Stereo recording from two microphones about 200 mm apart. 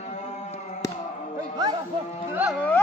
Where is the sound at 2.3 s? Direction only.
5° right (ahead or behind).